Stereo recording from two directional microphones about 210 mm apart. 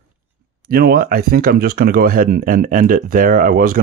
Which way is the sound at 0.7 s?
45° right (ahead or behind).